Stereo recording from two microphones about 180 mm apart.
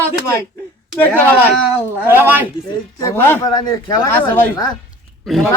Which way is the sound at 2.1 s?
10° right (ahead or behind).